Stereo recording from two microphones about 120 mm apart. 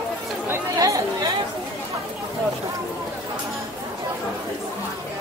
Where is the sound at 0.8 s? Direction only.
30° right (ahead or behind).